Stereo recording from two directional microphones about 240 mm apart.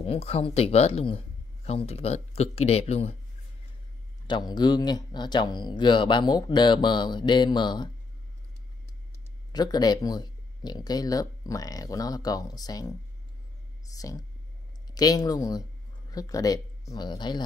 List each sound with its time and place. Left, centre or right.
0.0 s speech: left
4.3 s speech: centre
9.5 s speech: centre
13.9 s speech: centre